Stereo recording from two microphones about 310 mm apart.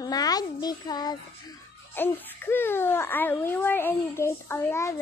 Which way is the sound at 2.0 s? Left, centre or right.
Centre.